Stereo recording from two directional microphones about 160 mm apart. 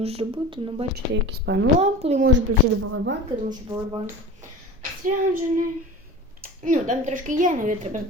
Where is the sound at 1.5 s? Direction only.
90° right.